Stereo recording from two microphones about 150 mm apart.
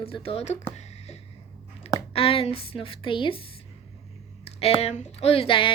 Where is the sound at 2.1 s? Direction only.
40° left (ahead or behind).